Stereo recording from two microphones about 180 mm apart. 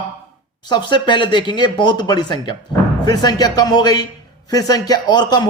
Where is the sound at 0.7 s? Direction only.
25° left (ahead or behind).